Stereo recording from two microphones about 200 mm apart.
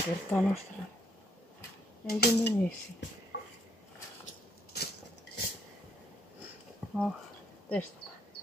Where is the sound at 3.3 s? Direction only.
55° left (ahead or behind).